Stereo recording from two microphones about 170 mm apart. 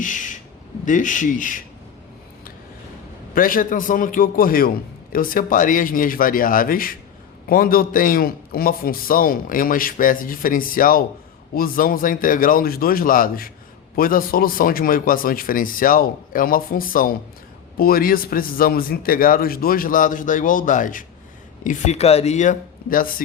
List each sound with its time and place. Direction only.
0.0 s a sound: 50° left (ahead or behind)
0.9 s speech: 50° left (ahead or behind)
3.3 s a man's voice: 55° left (ahead or behind)